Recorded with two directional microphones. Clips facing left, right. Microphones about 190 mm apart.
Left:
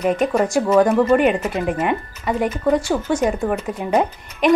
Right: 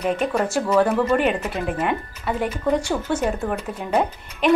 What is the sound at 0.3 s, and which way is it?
Speech, 10° left (ahead or behind).